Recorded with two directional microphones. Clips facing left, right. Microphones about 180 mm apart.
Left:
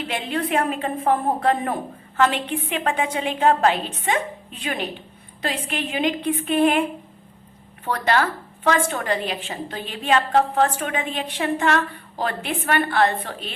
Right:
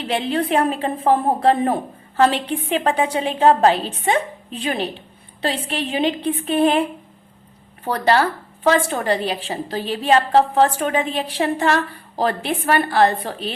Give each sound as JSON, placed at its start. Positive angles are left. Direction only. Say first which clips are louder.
{"t": 0.0, "sound": "a woman's voice", "louder": "right 4 dB", "side_deg": -35}
{"t": 7.9, "sound": "a woman's voice", "louder": "right 4 dB", "side_deg": -35}